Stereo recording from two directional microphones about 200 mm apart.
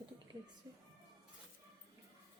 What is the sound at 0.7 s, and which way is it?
Speech, 20° right (ahead or behind).